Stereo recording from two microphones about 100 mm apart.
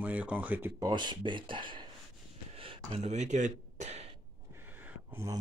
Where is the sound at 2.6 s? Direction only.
80° right.